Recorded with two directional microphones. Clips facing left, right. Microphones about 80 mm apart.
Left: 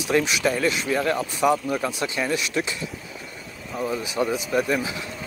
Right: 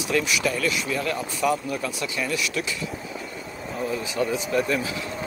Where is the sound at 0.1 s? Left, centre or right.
Left.